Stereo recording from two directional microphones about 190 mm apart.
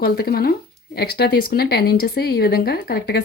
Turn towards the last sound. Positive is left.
turn(degrees=55)  # may be behind; listen again after turning